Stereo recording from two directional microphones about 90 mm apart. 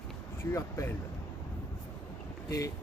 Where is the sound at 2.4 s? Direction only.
40° left (ahead or behind).